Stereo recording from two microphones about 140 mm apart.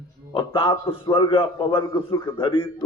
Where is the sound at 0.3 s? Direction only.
35° left (ahead or behind).